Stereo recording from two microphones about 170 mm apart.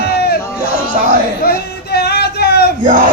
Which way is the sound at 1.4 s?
65° left (ahead or behind).